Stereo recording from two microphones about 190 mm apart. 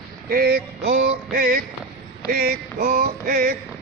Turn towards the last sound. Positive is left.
turn(degrees=-50)  # may be behind; listen again after turning